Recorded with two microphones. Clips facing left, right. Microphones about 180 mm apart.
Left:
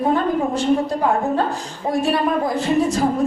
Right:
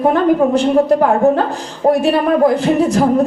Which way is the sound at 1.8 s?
60° right (ahead or behind).